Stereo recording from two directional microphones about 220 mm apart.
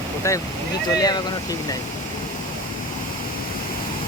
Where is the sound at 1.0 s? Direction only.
15° left (ahead or behind).